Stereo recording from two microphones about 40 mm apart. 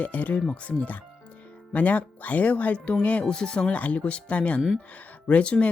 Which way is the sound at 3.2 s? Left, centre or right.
Left.